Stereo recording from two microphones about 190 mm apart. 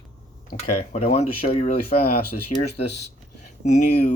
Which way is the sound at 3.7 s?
40° left (ahead or behind).